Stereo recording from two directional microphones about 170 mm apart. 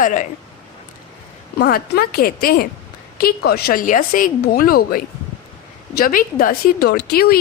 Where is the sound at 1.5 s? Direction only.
65° left (ahead or behind).